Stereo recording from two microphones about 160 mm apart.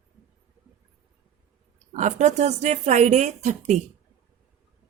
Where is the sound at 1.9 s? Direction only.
50° right (ahead or behind).